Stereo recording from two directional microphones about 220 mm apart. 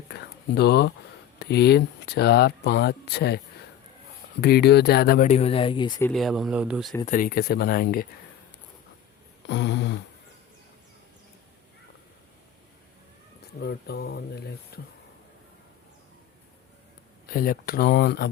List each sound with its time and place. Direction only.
0.1 s speech: 50° left (ahead or behind); by 5.9 s 20° left (ahead or behind)
6.0 s speech: 5° left (ahead or behind)
7.0 s speech: 35° left (ahead or behind)
9.5 s speech: 50° left (ahead or behind)
13.6 s speech: 45° left (ahead or behind)
14.7 s a sound: 45° left (ahead or behind)
17.2 s speech: 40° left (ahead or behind)